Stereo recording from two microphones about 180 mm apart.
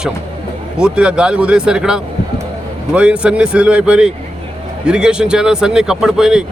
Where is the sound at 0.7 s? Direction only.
5° right (ahead or behind).